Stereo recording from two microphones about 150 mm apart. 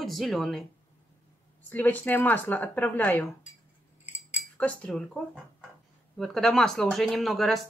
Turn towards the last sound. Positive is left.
turn(degrees=0)  # may be behind; listen again after turning